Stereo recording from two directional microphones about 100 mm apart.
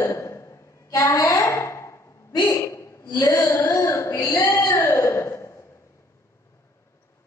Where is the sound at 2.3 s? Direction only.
40° left (ahead or behind).